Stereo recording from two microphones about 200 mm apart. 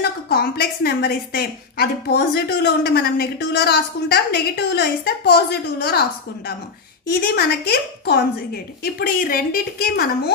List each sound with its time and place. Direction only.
0.0 s a woman's voice: 50° left (ahead or behind)
7.1 s a woman's voice: 50° left (ahead or behind)